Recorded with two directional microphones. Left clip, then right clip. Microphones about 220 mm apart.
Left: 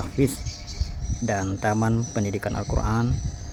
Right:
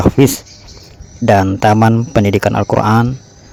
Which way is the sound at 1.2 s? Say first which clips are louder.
Right 15 dB; 40° right (ahead or behind).